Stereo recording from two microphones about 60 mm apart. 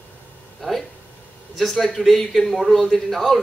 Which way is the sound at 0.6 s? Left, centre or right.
Centre.